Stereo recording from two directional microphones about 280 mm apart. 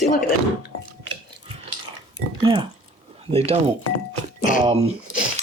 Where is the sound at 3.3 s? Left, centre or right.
Right.